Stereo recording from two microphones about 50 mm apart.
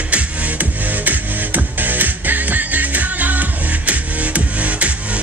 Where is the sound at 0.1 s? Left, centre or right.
Right.